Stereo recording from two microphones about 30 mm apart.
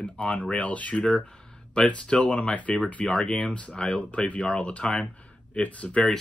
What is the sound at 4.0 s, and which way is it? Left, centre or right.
Speech, left.